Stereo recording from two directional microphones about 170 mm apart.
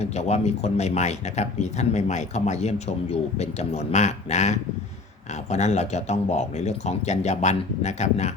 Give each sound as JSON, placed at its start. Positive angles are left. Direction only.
{"t": 0.0, "sound": "speech", "side_deg": 40}